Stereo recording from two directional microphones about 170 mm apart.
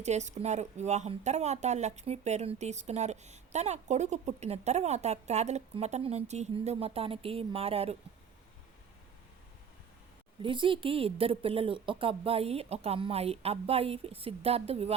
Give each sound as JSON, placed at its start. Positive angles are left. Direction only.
{"t": 0.0, "sound": "speech", "side_deg": -40}
{"t": 10.4, "sound": "speech", "side_deg": -30}